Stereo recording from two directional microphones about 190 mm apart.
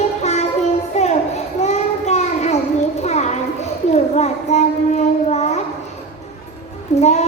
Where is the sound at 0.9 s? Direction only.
35° left (ahead or behind).